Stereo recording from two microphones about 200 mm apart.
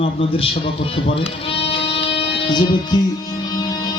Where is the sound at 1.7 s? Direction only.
30° left (ahead or behind).